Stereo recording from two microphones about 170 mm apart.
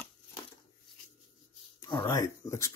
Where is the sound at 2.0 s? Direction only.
20° left (ahead or behind).